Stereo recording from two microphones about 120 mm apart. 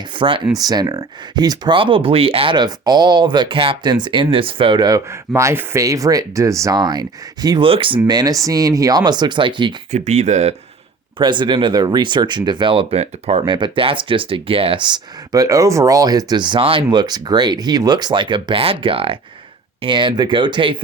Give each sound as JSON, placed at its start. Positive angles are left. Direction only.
{"t": 0.2, "sound": "speech", "side_deg": -45}
{"t": 0.5, "sound": "speech", "side_deg": -35}
{"t": 4.9, "sound": "speech", "side_deg": -25}
{"t": 7.6, "sound": "speech", "side_deg": -50}
{"t": 9.9, "sound": "speech", "side_deg": -70}
{"t": 11.2, "sound": "speech", "side_deg": -40}
{"t": 13.4, "sound": "speech", "side_deg": -40}